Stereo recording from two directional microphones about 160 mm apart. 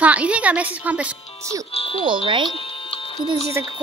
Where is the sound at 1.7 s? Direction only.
35° left (ahead or behind).